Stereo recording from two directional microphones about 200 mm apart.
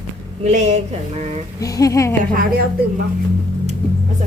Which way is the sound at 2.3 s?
50° right (ahead or behind).